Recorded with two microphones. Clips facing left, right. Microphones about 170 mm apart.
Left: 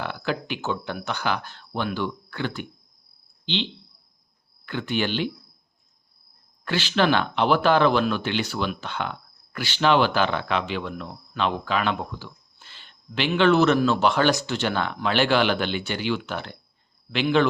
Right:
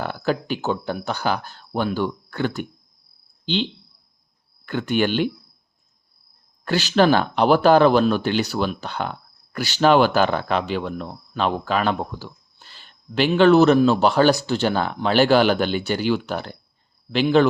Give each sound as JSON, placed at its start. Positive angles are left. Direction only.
{"t": 0.0, "sound": "speech", "side_deg": -40}
{"t": 6.7, "sound": "speech", "side_deg": -40}